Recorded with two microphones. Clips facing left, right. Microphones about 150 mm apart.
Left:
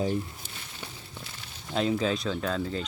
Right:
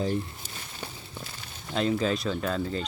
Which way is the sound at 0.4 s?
45° right (ahead or behind).